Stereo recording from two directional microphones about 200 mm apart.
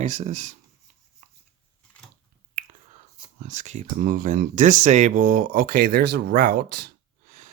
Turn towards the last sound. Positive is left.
turn(degrees=-45)  # may be behind; listen again after turning